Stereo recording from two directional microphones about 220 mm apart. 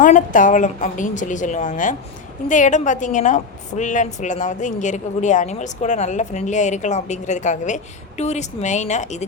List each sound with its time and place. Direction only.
0.0 s a woman's voice: 35° left (ahead or behind)